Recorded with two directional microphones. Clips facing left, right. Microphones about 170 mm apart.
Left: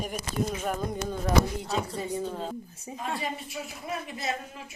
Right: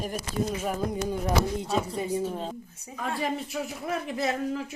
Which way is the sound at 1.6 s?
20° right (ahead or behind).